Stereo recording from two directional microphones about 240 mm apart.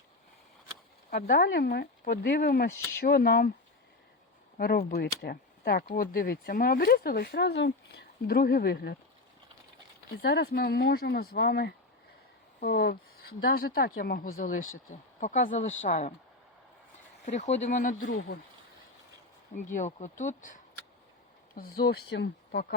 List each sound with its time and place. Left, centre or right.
1.1 s speech: left
4.5 s speech: left
10.2 s speech: left
17.2 s speech: left
19.7 s speech: left